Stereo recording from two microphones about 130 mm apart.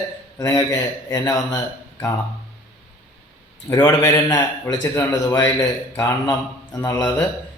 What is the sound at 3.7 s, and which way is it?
A man's voice, 20° left (ahead or behind).